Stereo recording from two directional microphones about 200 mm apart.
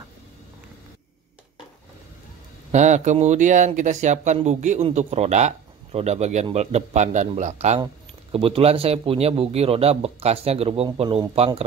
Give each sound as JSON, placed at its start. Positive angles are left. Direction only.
{"t": 2.7, "sound": "speech", "side_deg": -35}